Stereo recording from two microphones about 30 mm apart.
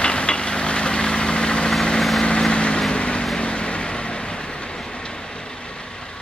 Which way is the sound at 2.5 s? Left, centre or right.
Left.